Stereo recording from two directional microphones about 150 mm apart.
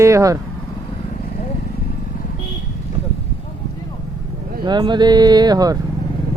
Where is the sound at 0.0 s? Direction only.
20° right (ahead or behind).